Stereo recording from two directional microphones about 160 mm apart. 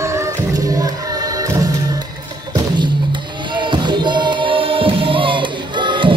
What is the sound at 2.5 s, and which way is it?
Music, 30° right (ahead or behind).